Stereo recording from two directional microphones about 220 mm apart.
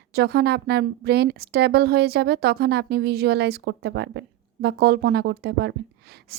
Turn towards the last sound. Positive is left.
turn(degrees=-45)  # may be behind; listen again after turning